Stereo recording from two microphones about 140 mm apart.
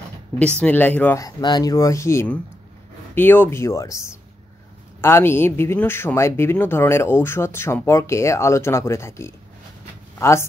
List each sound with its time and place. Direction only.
0.3 s speech: 10° left (ahead or behind)
1.2 s speech: 30° left (ahead or behind)